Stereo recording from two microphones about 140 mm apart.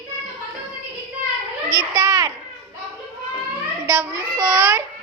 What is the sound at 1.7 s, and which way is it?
Children playing, 25° right (ahead or behind).